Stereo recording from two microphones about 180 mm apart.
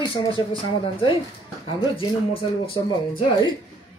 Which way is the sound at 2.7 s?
30° left (ahead or behind).